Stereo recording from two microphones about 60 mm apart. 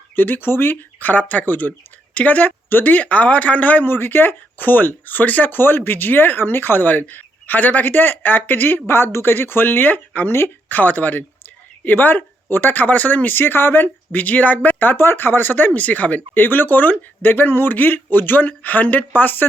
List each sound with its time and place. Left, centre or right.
0.2 s speech: left